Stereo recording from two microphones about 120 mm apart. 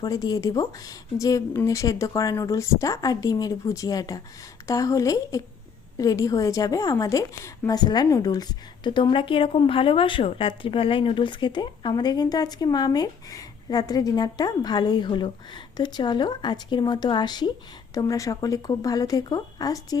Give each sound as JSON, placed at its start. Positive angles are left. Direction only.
{"t": 0.0, "sound": "a woman's voice", "side_deg": 30}
{"t": 7.8, "sound": "a woman's voice", "side_deg": 35}